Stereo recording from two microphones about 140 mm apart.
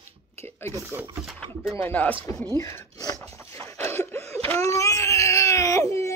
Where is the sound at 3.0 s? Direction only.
30° left (ahead or behind).